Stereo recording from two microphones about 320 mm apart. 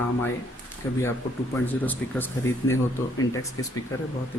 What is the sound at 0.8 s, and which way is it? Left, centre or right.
Speech, centre.